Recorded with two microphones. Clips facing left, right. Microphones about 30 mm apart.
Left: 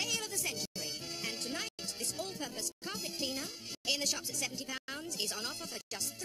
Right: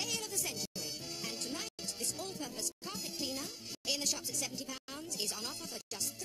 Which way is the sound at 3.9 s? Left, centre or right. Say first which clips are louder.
Left 2 dB; left.